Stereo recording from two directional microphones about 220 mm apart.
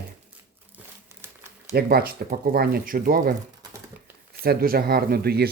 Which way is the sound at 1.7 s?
45° right (ahead or behind).